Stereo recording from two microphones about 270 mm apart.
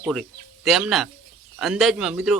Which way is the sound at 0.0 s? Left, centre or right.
Centre.